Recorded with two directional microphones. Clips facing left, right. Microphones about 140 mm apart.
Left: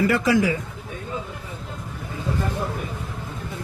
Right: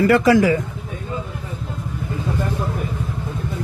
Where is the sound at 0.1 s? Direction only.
60° right (ahead or behind).